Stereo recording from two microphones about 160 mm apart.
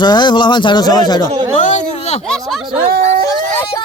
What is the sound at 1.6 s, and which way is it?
Speech, 50° left (ahead or behind).